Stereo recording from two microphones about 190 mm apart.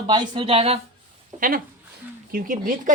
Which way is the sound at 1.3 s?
45° right (ahead or behind).